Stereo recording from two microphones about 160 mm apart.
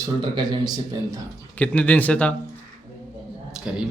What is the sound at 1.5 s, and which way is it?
Speech, 10° left (ahead or behind).